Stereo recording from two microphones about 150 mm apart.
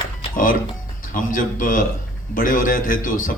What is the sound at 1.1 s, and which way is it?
A man's voice, 65° left (ahead or behind).